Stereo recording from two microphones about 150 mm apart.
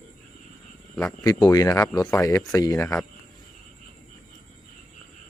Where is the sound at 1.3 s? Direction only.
30° left (ahead or behind).